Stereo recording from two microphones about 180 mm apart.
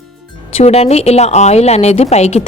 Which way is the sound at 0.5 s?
35° left (ahead or behind).